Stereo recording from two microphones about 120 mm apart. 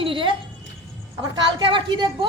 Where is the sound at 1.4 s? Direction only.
40° right (ahead or behind).